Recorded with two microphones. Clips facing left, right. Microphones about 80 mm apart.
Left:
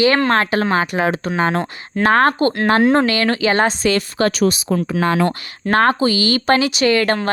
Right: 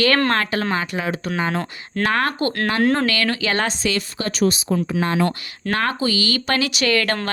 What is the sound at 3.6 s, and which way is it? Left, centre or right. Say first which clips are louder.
Speech: left 6 dB; left.